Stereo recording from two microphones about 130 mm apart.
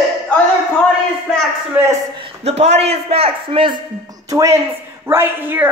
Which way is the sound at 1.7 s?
15° right (ahead or behind).